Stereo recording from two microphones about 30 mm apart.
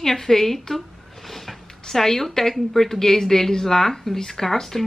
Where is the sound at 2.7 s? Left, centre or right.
Centre.